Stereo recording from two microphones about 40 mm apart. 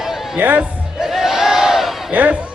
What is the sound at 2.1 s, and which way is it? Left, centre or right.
Speech, right.